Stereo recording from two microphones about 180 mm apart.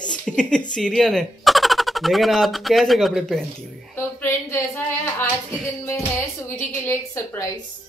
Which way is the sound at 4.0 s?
15° left (ahead or behind).